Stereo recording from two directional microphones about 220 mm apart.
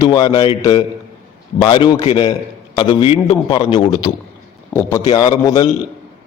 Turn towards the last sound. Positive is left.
turn(degrees=20)  # may be behind; listen again after turning